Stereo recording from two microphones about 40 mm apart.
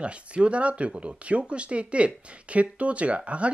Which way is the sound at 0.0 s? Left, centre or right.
Right.